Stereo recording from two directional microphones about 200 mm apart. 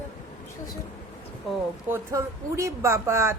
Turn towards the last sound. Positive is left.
turn(degrees=-15)  # may be behind; listen again after turning